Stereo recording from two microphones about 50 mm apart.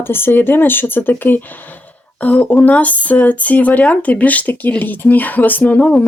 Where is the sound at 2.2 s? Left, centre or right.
Left.